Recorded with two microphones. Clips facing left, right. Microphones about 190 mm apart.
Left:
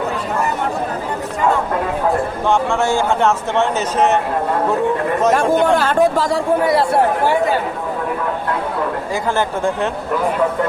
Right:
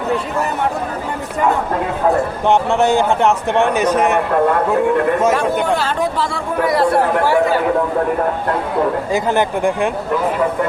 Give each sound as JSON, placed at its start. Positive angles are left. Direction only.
{"t": 2.5, "sound": "a man's voice", "side_deg": -20}
{"t": 5.7, "sound": "speech", "side_deg": 50}
{"t": 6.7, "sound": "speech", "side_deg": 25}
{"t": 9.1, "sound": "a man's voice", "side_deg": -15}